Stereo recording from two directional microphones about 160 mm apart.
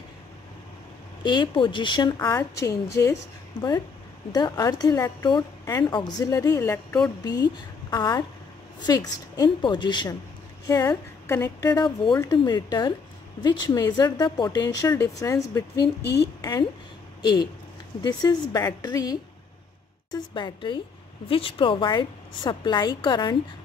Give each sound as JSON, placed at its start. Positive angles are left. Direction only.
{"t": 1.2, "sound": "a woman's voice", "side_deg": 30}
{"t": 4.3, "sound": "a woman's voice", "side_deg": 25}
{"t": 18.0, "sound": "a woman's voice", "side_deg": 25}